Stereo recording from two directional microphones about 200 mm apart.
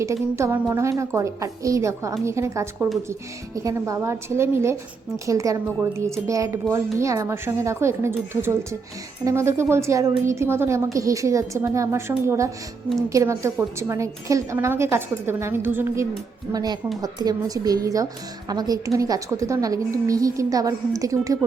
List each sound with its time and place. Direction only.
0.0 s a woman's voice: 15° right (ahead or behind)